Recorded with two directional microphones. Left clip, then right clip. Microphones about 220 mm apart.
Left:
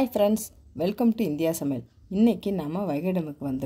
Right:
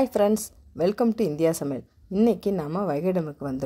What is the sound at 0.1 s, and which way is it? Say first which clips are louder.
Speech: right 1 dB; 25° right (ahead or behind).